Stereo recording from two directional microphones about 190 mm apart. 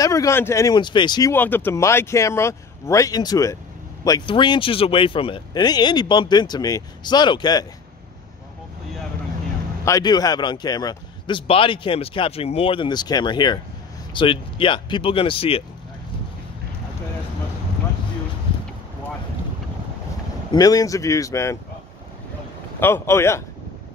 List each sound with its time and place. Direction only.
0.0 s speech: 15° left (ahead or behind)
1.3 s speech: 10° left (ahead or behind)
9.8 s speech: 20° left (ahead or behind)
20.5 s speech: 20° left (ahead or behind)
22.8 s speech: 10° left (ahead or behind)